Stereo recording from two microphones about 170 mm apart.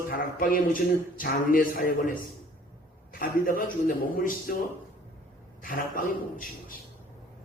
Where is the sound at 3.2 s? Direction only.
55° left (ahead or behind).